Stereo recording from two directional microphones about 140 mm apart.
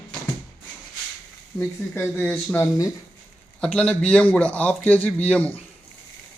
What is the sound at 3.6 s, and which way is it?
A man's voice, 5° left (ahead or behind).